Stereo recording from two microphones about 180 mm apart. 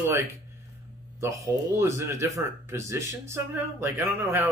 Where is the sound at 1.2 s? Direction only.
15° right (ahead or behind).